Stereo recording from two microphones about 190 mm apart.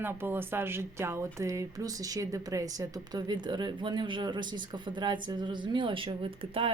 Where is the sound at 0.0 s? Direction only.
10° right (ahead or behind).